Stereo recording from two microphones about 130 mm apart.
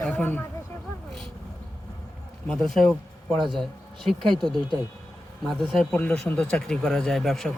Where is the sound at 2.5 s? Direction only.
5° left (ahead or behind).